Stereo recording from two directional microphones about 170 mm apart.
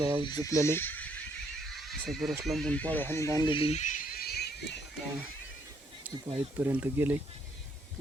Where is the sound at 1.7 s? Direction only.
Centre (ahead or behind).